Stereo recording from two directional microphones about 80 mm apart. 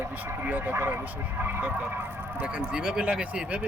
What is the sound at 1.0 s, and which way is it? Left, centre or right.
Speech, centre.